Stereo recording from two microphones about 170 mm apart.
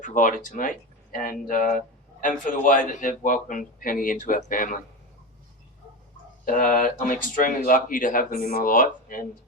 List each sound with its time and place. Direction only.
0.0 s a man's voice: 50° left (ahead or behind)
6.4 s a man's voice: 55° left (ahead or behind)